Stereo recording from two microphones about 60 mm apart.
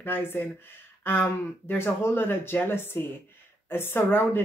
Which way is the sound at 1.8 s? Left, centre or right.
Left.